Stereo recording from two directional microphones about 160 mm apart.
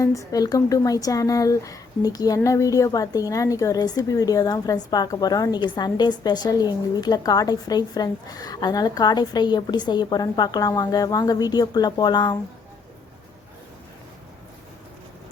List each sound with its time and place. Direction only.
0.0 s a woman's voice: 20° left (ahead or behind)